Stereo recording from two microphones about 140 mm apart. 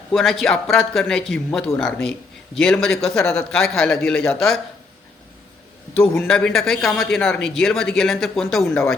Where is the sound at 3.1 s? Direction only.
15° left (ahead or behind).